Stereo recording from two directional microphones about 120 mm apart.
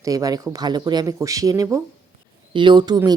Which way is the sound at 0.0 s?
30° right (ahead or behind).